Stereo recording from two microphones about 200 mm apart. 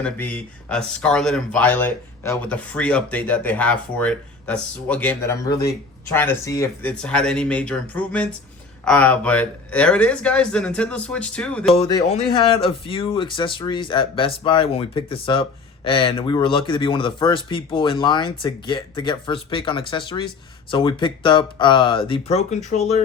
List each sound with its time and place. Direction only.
0.0 s speech: 10° left (ahead or behind)
7.0 s speech: 5° left (ahead or behind)
11.7 s speech: 25° left (ahead or behind)